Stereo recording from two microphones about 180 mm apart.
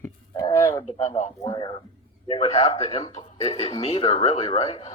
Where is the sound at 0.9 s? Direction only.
35° left (ahead or behind).